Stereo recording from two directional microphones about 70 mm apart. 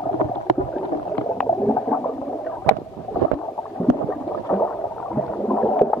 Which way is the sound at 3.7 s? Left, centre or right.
Centre.